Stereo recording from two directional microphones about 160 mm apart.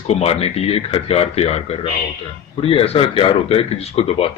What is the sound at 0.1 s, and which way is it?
A man's voice, 40° left (ahead or behind).